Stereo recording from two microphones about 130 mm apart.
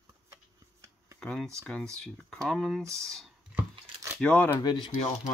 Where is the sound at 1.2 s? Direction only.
5° left (ahead or behind).